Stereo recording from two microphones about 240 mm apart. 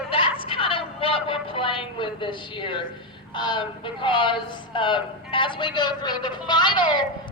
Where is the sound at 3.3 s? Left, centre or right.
Centre.